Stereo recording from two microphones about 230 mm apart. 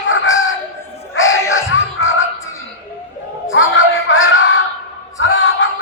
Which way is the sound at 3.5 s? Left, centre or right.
Left.